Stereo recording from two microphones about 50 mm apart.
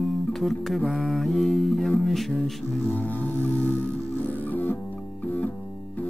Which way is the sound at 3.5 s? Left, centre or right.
Left.